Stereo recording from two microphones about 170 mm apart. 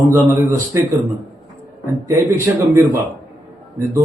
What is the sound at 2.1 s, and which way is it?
Speech, 15° right (ahead or behind).